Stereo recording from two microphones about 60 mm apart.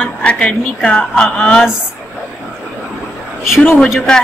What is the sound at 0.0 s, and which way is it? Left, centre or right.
Speech, left.